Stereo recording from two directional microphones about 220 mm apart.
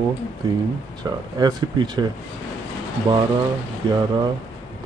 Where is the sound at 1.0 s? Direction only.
20° right (ahead or behind).